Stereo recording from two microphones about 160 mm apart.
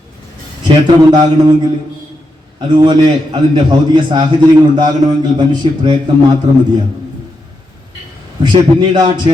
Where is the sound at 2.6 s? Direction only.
30° right (ahead or behind).